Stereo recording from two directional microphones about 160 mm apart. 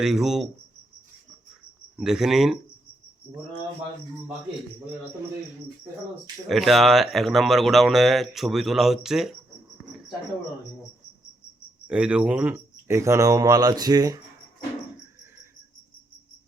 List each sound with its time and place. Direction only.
0.0 s speech: 5° right (ahead or behind)
2.0 s speech: 5° right (ahead or behind)
6.5 s speech: centre (ahead or behind)
11.9 s speech: 5° right (ahead or behind); by 14.2 s 25° right (ahead or behind)